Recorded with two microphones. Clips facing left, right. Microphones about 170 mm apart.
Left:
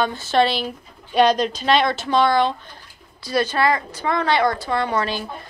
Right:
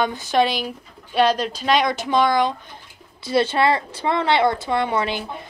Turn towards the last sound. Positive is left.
turn(degrees=-20)  # may be behind; listen again after turning